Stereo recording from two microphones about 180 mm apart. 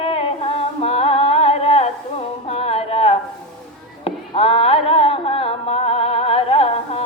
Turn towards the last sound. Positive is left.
turn(degrees=30)  # may be behind; listen again after turning